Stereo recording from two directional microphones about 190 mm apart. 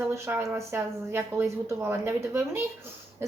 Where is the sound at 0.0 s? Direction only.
10° right (ahead or behind).